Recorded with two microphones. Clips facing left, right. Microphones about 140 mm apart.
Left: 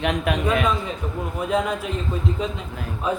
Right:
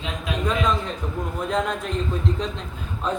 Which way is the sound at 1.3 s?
5° left (ahead or behind).